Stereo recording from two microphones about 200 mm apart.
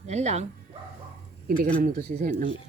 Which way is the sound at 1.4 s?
45° right (ahead or behind).